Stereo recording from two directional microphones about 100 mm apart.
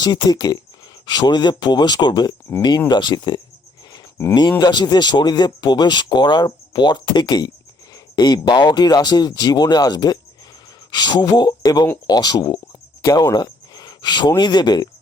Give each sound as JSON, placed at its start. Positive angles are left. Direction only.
{"t": 0.0, "sound": "speech", "side_deg": 45}
{"t": 4.6, "sound": "speech", "side_deg": 45}